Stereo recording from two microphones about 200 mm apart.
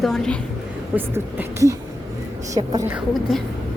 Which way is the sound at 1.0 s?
10° right (ahead or behind).